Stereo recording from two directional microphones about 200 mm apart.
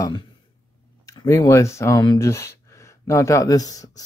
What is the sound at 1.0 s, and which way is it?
Speech, 15° left (ahead or behind).